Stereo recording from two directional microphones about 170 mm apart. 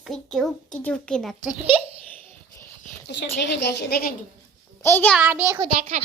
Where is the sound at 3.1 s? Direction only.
90° left; by 4.0 s 70° left (ahead or behind).